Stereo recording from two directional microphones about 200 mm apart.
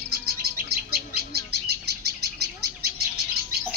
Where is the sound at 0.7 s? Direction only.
50° right (ahead or behind).